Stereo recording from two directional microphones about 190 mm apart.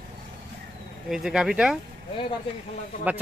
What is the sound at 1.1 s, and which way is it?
Speech, centre (ahead or behind).